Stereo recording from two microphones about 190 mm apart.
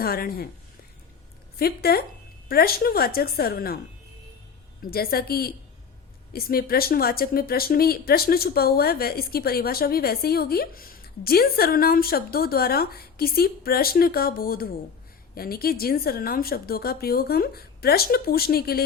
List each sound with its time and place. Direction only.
0.0 s speech: 50° left (ahead or behind)
1.5 s speech: 55° left (ahead or behind)
4.8 s speech: 55° left (ahead or behind)